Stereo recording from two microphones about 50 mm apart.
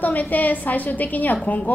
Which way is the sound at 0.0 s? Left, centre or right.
Left.